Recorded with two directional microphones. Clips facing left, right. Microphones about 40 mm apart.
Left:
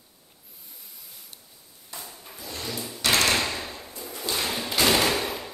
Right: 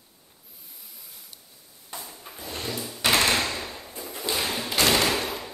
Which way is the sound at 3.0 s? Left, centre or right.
Right.